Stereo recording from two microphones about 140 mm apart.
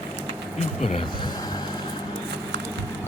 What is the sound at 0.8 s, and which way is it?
Speech, 55° left (ahead or behind).